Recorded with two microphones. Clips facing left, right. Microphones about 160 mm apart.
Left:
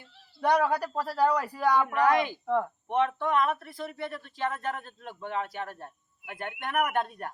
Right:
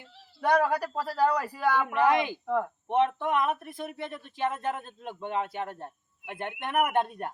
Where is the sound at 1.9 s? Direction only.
20° right (ahead or behind).